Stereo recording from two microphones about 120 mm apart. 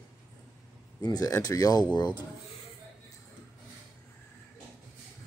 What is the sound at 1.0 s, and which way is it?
Speech, 30° left (ahead or behind).